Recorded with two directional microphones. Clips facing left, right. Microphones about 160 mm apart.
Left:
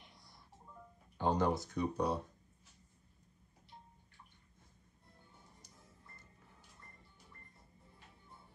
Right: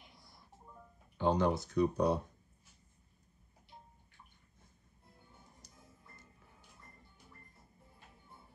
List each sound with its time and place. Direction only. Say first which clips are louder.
1.2 s speech: right 2 dB; 70° right (ahead or behind)